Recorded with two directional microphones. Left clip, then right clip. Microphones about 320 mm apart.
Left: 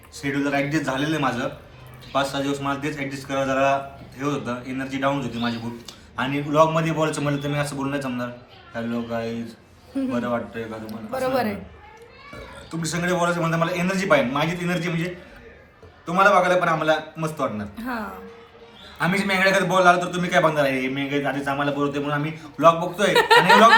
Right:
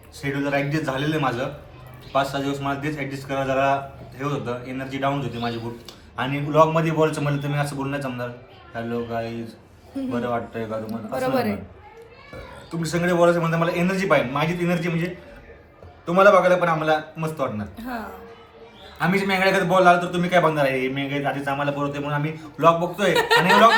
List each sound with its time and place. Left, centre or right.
0.2 s a man's voice: centre
12.7 s a man's voice: centre
16.0 s a man's voice: centre
17.7 s speech: left
18.9 s a man's voice: centre